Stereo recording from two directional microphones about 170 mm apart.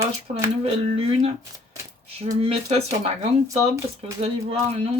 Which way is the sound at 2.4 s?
35° right (ahead or behind).